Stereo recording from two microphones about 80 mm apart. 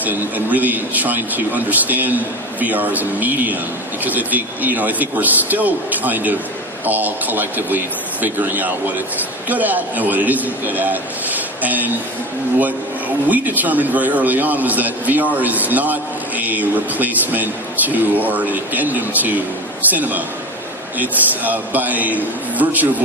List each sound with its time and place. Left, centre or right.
0.0 s speech: right